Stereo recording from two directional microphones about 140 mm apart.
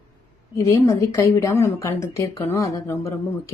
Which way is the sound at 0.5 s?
20° left (ahead or behind).